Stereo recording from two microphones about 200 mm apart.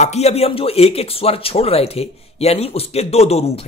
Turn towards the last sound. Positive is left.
turn(degrees=30)  # may be behind; listen again after turning